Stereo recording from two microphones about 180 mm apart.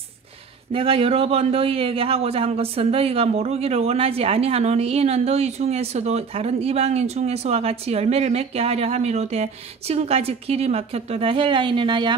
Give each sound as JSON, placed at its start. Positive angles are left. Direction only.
{"t": 0.7, "sound": "a man's voice", "side_deg": -30}